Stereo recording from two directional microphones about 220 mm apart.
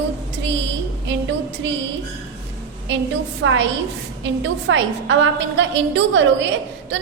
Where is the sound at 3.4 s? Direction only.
60° right (ahead or behind).